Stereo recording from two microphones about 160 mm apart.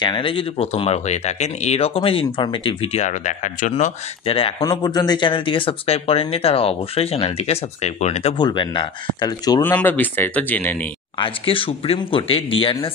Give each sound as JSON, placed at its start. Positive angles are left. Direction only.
{"t": 0.0, "sound": "speech", "side_deg": 30}
{"t": 4.6, "sound": "speech", "side_deg": 25}
{"t": 8.4, "sound": "speech", "side_deg": 30}
{"t": 9.6, "sound": "speech", "side_deg": 10}
{"t": 11.1, "sound": "speech", "side_deg": 35}